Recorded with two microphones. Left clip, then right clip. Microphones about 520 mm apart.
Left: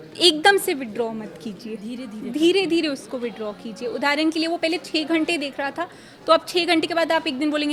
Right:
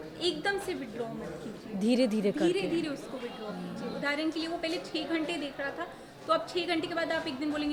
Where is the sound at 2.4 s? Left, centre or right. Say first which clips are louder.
Left 16 dB; left.